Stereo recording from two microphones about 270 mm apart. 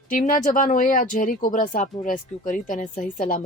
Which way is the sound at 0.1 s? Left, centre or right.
Left.